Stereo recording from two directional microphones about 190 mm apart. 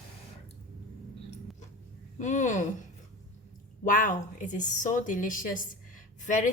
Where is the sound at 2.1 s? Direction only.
40° left (ahead or behind).